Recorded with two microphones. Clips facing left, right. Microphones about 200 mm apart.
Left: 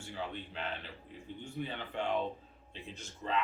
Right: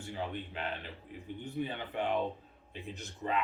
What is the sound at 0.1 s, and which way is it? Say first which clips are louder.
Speech: right 2 dB; 15° right (ahead or behind).